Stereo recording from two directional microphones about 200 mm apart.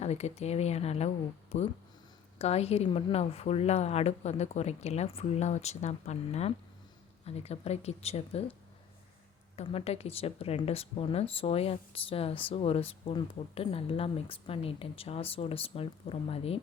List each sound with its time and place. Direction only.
0.0 s a woman's voice: 35° left (ahead or behind)
9.6 s speech: 30° left (ahead or behind)